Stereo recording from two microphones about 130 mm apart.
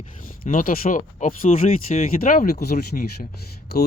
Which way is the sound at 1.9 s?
65° left (ahead or behind).